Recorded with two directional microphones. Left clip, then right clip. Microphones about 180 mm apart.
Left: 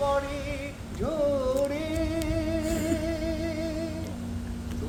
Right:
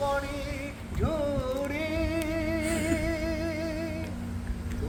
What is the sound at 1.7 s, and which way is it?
Music, centre (ahead or behind).